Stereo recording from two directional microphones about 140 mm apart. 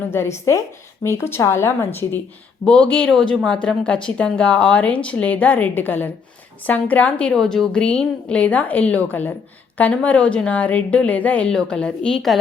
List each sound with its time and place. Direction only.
0.1 s a woman's voice: 20° left (ahead or behind); by 12.4 s 5° left (ahead or behind)